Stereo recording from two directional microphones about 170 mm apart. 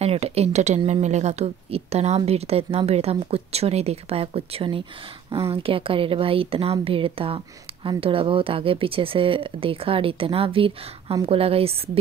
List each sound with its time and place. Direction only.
0.0 s speech: 35° right (ahead or behind)